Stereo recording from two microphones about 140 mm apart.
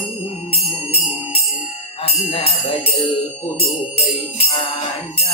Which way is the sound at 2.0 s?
45° left (ahead or behind).